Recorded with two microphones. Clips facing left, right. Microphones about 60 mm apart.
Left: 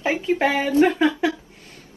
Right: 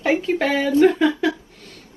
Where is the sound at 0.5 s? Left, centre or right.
Left.